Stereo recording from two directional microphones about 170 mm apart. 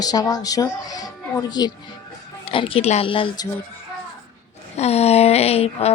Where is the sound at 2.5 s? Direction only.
30° left (ahead or behind).